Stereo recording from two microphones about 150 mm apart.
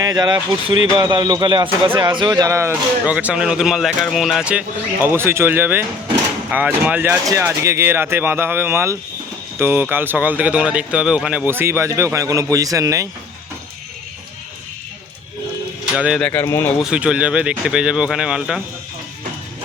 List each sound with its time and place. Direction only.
0.0 s a man's voice: 25° right (ahead or behind); by 4.6 s 5° right (ahead or behind)
5.0 s speech: 15° right (ahead or behind)
16.0 s speech: 5° right (ahead or behind)
16.2 s speech: 15° left (ahead or behind)
16.8 s speech: 5° right (ahead or behind)